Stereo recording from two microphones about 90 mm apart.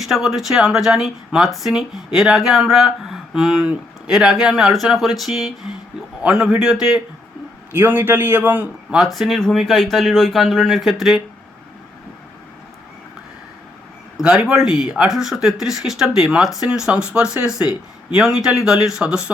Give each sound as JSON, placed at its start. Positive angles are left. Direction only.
{"t": 0.0, "sound": "speech", "side_deg": -5}
{"t": 3.6, "sound": "speech", "side_deg": -15}
{"t": 4.1, "sound": "speech", "side_deg": -5}
{"t": 7.7, "sound": "a man's voice", "side_deg": -20}
{"t": 9.0, "sound": "speech", "side_deg": -5}
{"t": 14.2, "sound": "speech", "side_deg": -5}